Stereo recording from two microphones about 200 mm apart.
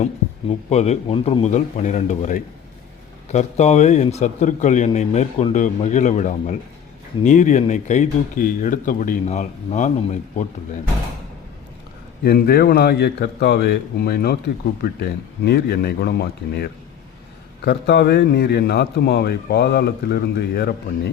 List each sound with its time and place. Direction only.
0.0 s a man's voice: 35° left (ahead or behind)
12.2 s a man's voice: 50° left (ahead or behind)